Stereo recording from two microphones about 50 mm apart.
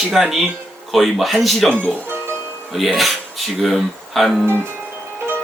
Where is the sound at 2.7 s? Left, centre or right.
Centre.